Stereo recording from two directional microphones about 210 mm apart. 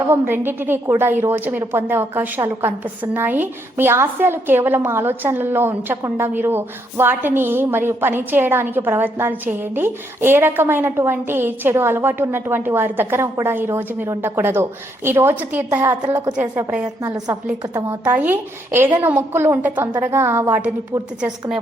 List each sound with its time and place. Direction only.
0.0 s a woman's voice: 10° right (ahead or behind)